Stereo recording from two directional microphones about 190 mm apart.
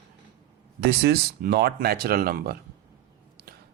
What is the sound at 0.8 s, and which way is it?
Speech, 60° right (ahead or behind).